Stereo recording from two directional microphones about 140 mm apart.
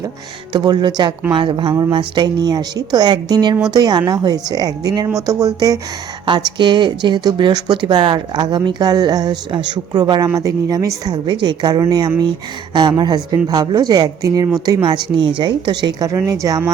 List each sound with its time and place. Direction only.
0.5 s speech: 30° right (ahead or behind)